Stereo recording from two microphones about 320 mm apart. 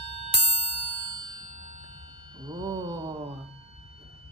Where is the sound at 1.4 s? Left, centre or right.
Right.